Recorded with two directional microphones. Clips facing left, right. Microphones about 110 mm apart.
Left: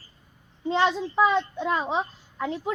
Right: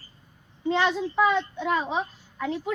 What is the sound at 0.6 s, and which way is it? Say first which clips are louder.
A child's voice: left 1 dB; 30° left (ahead or behind).